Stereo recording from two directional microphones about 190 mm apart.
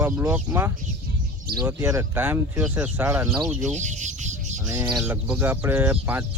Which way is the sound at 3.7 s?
40° right (ahead or behind).